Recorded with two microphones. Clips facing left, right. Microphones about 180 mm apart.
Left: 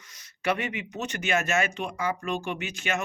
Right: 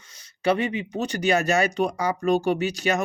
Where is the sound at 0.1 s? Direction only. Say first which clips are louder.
Right 6 dB; 30° right (ahead or behind).